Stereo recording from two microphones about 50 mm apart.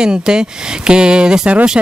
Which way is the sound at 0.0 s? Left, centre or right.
Centre.